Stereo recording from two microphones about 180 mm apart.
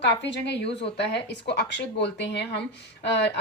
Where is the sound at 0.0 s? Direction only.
75° left (ahead or behind).